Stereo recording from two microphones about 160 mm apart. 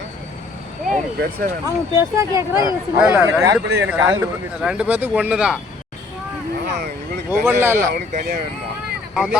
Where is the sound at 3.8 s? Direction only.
10° right (ahead or behind).